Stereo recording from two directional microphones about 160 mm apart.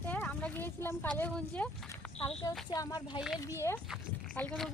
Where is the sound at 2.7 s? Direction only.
25° left (ahead or behind).